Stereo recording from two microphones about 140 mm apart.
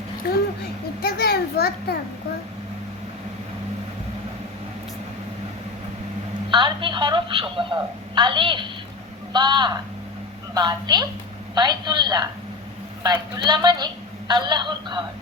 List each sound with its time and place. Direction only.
0.2 s a sound: 90° left
1.0 s a child's voice: 90° left
6.5 s a woman's voice: 35° right (ahead or behind)
13.3 s a woman's voice: 30° right (ahead or behind)